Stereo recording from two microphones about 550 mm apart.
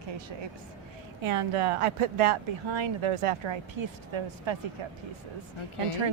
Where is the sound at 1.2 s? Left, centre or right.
Right.